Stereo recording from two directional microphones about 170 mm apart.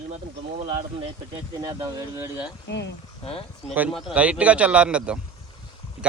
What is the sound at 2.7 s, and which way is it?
Speech, 90° left.